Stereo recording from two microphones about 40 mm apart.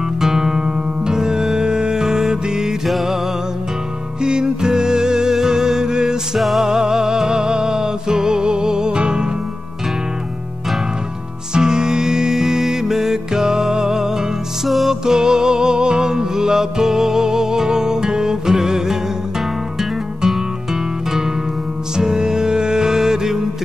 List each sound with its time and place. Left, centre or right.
0.2 s music: centre
4.2 s music: centre
6.3 s music: centre
6.7 s music: centre
11.5 s music: centre
20.2 s music: centre
21.9 s music: centre